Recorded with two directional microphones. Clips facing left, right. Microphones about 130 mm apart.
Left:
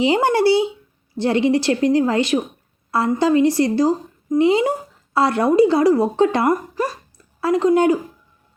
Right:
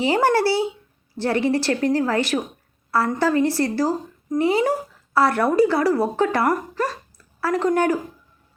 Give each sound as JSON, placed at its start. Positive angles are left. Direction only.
{"t": 0.0, "sound": "a woman's voice", "side_deg": 20}